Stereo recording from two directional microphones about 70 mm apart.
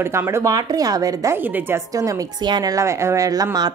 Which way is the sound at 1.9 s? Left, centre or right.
Right.